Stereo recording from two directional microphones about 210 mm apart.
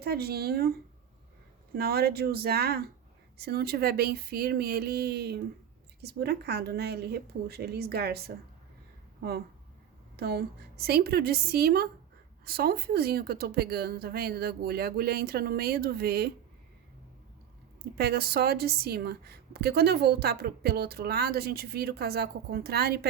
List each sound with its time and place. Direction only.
0.0 s a woman's voice: 50° right (ahead or behind)
1.7 s a woman's voice: 45° right (ahead or behind)
10.2 s a woman's voice: 50° right (ahead or behind)
17.9 s a woman's voice: 50° right (ahead or behind)